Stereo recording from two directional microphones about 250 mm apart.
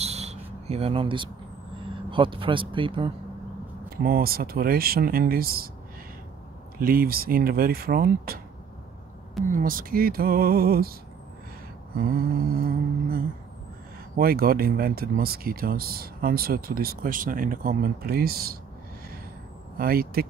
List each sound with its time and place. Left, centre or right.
0.0 s a sound: right
2.0 s speech: centre
3.9 s speech: right
6.8 s speech: right
9.5 s speech: right
14.1 s speech: right
19.8 s speech: right